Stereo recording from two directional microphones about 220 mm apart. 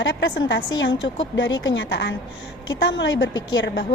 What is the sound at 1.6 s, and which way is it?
A woman's voice, 55° left (ahead or behind).